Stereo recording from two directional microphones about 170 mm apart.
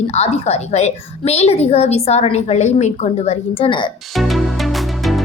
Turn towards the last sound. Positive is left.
turn(degrees=0)  # may be behind; listen again after turning